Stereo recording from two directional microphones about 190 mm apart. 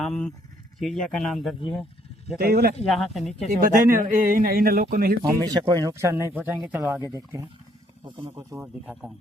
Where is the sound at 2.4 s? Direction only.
55° right (ahead or behind).